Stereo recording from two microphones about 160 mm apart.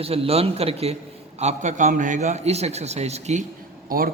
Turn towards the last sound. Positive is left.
turn(degrees=-65)  # may be behind; listen again after turning